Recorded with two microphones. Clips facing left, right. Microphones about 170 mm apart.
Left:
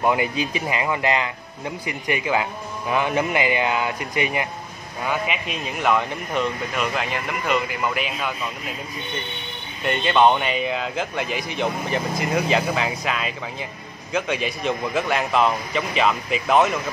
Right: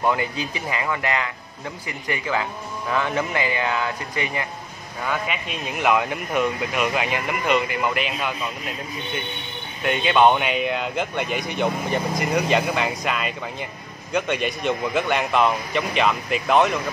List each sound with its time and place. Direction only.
0.0 s a man's voice: 15° left (ahead or behind)
5.0 s a man's voice: 5° left (ahead or behind)
9.8 s a man's voice: centre (ahead or behind)